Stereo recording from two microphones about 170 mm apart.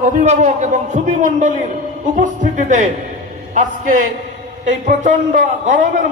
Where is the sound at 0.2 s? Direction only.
45° right (ahead or behind).